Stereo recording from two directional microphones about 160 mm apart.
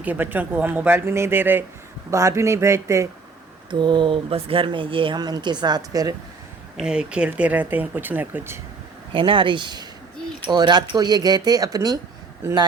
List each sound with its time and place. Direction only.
0.0 s speech: 10° right (ahead or behind)
3.7 s speech: 30° right (ahead or behind)
6.7 s speech: 5° right (ahead or behind)
9.1 s speech: 35° right (ahead or behind); by 12.6 s 15° right (ahead or behind)